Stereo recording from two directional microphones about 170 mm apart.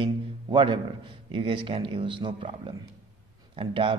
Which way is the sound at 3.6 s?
30° right (ahead or behind).